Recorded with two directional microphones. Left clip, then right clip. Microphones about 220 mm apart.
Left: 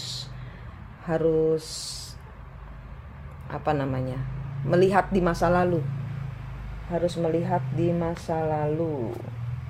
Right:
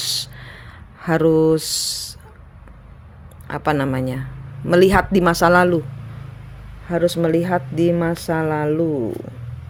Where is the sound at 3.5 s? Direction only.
40° right (ahead or behind).